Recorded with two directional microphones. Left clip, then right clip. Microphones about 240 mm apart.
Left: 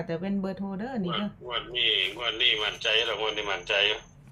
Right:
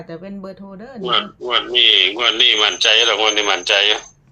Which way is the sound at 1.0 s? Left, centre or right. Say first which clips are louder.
Right 18 dB; right.